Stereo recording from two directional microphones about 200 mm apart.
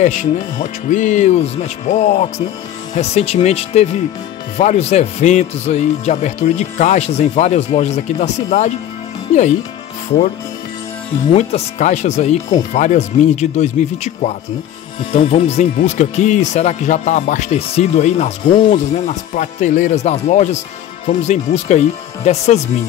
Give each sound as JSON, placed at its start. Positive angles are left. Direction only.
{"t": 0.0, "sound": "speech", "side_deg": 35}
{"t": 11.3, "sound": "speech", "side_deg": 35}